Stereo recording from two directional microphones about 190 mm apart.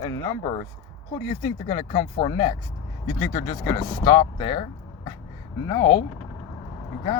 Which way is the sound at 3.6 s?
25° left (ahead or behind).